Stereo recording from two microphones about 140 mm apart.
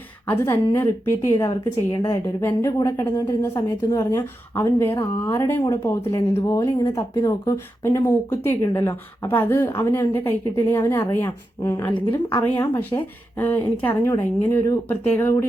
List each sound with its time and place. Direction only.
0.3 s speech: 15° left (ahead or behind)